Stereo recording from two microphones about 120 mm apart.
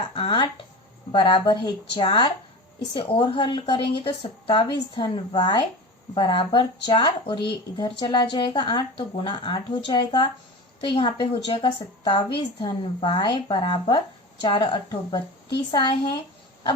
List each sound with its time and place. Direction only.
0.2 s a woman's voice: 40° left (ahead or behind)